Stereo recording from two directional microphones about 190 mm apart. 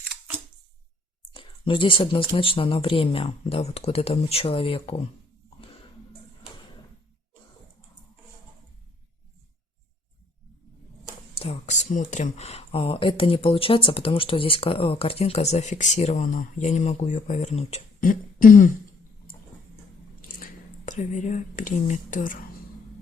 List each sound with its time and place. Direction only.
1.3 s speech: 25° left (ahead or behind)
11.3 s speech: 35° left (ahead or behind)
20.2 s speech: 45° left (ahead or behind)